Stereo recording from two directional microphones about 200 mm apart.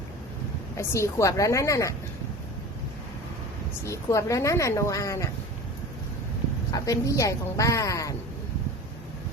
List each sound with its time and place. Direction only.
0.8 s speech: 15° left (ahead or behind)
3.8 s speech: 15° left (ahead or behind)
6.7 s speech: 15° left (ahead or behind)